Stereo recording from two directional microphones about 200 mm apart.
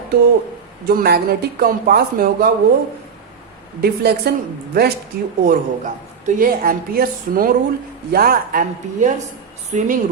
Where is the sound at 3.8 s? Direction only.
50° right (ahead or behind).